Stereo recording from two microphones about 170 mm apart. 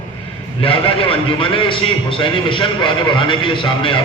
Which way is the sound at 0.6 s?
30° left (ahead or behind).